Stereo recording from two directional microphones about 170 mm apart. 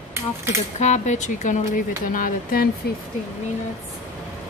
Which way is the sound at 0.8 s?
45° left (ahead or behind).